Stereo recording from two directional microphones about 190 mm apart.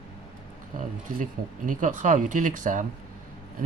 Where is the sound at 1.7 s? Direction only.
40° right (ahead or behind).